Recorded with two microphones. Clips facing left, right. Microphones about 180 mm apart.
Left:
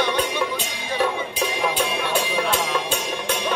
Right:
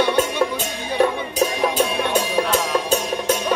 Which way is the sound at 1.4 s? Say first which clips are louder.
Right 6 dB; 40° right (ahead or behind).